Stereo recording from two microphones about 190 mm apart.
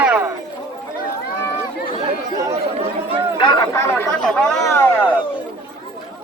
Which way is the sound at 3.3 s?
25° left (ahead or behind).